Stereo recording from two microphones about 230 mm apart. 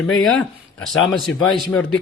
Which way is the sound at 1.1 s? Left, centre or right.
Centre.